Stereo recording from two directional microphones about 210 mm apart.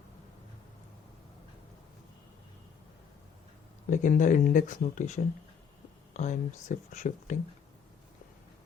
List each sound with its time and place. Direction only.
3.8 s speech: 40° left (ahead or behind)